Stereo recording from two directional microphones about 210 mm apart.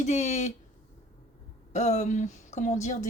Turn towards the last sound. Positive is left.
turn(degrees=35)  # may be behind; listen again after turning